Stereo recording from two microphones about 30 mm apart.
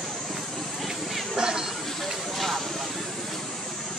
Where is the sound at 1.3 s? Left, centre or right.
Right.